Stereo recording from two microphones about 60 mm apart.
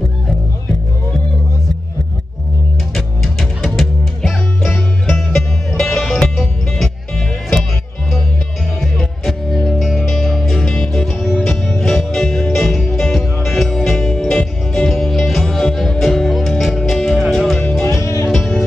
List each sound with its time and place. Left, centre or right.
2.9 s music: centre
8.9 s music: centre
10.6 s music: centre
17.8 s music: left
18.3 s music: centre